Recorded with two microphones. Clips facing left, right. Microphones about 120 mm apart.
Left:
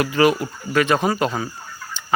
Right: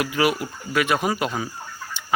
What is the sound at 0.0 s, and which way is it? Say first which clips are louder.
Speech: left 5 dB; 5° right (ahead or behind).